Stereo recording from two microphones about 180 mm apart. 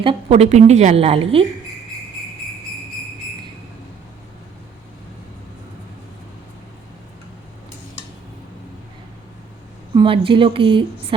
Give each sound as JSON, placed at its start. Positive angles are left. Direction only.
{"t": 0.0, "sound": "a woman's voice", "side_deg": -30}
{"t": 9.9, "sound": "speech", "side_deg": -25}